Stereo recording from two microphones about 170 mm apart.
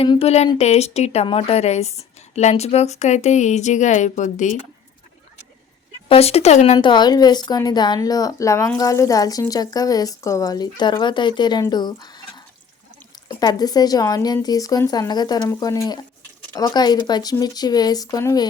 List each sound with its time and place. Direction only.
0.0 s a woman's voice: 35° left (ahead or behind)
6.1 s a woman's voice: 35° left (ahead or behind)
6.7 s a woman's voice: 25° left (ahead or behind)